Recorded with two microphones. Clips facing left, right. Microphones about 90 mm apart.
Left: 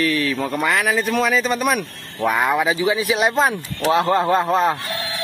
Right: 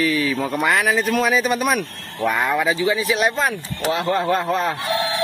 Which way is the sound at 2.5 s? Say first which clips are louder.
Left 1 dB; 15° left (ahead or behind).